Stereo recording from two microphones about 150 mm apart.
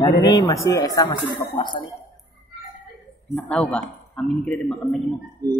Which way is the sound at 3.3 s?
10° left (ahead or behind).